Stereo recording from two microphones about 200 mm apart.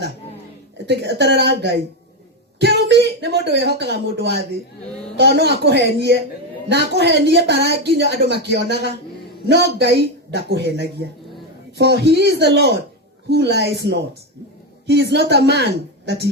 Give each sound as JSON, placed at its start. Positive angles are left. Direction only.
{"t": 0.9, "sound": "a woman's voice", "side_deg": -55}
{"t": 9.7, "sound": "a woman's voice", "side_deg": -55}